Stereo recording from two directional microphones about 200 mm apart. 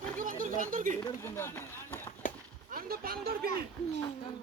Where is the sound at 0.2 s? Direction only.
40° right (ahead or behind).